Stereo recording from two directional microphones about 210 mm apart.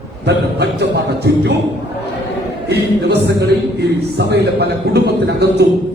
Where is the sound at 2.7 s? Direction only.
50° right (ahead or behind).